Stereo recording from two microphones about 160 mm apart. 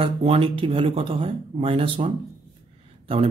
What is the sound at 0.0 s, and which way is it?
Speech, 35° right (ahead or behind).